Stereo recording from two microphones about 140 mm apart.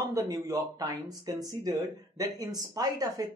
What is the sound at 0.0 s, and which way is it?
Speech, 25° right (ahead or behind).